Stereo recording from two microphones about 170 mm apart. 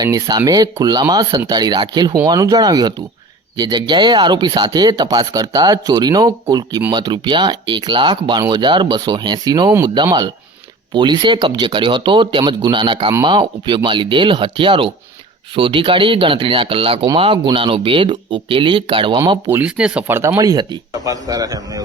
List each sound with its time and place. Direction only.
0.0 s speech: 20° right (ahead or behind)
19.2 s speech: 15° right (ahead or behind)